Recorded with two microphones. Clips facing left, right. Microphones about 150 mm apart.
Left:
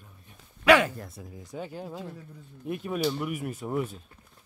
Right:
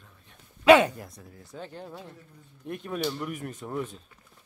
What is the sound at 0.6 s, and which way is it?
Speech, 25° right (ahead or behind).